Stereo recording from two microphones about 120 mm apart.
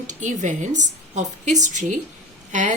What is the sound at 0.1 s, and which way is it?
A woman's voice, 90° right.